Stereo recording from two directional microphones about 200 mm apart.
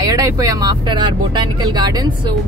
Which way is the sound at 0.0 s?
15° right (ahead or behind).